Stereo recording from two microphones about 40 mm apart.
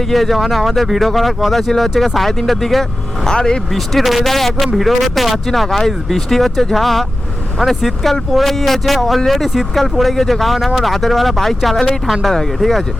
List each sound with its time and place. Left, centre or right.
0.0 s speech: centre
3.2 s speech: centre
3.7 s speech: centre
11.9 s speech: centre
12.2 s speech: centre